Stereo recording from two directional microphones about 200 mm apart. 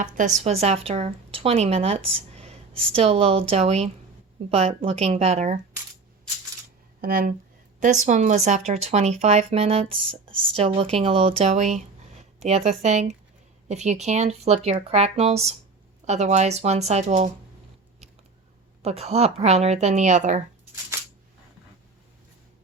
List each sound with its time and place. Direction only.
0.4 s speech: 30° right (ahead or behind)
7.0 s speech: 45° right (ahead or behind)
18.8 s speech: 30° right (ahead or behind)